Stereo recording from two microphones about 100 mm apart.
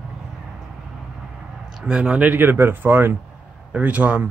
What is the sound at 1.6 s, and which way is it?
Speech, 10° right (ahead or behind).